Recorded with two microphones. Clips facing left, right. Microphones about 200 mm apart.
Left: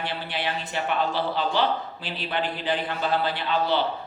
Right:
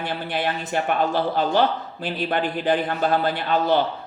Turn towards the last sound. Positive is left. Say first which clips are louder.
# right 4 dB
turn(degrees=-50)  # may be behind; listen again after turning